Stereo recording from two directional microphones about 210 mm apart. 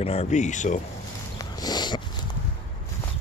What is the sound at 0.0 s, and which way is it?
Speech, 30° left (ahead or behind).